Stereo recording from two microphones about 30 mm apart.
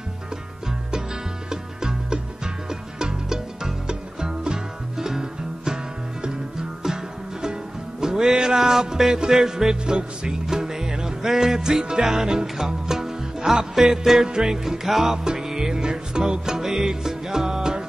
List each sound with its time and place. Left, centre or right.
1.5 s music: right
8.0 s music: centre
10.4 s music: centre
14.2 s music: right
16.5 s music: centre